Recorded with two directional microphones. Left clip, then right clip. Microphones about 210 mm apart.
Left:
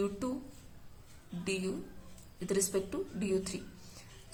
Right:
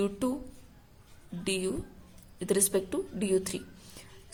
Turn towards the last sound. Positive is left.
turn(degrees=-40)  # may be behind; listen again after turning